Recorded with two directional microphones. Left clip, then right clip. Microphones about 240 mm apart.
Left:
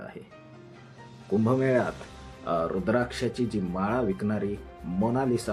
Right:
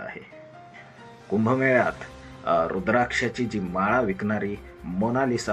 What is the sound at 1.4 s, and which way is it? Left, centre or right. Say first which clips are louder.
Speech: right 5 dB; centre.